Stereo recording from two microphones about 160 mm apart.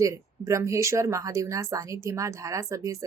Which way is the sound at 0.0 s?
20° right (ahead or behind).